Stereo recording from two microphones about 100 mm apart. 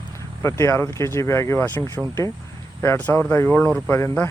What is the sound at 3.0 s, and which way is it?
Speech, 20° left (ahead or behind).